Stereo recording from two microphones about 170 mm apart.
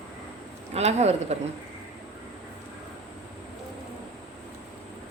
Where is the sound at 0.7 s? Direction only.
40° right (ahead or behind).